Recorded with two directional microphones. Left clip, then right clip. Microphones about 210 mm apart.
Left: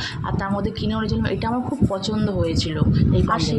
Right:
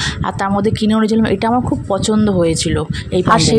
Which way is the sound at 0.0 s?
50° right (ahead or behind).